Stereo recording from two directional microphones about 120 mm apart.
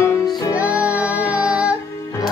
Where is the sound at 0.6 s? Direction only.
10° right (ahead or behind).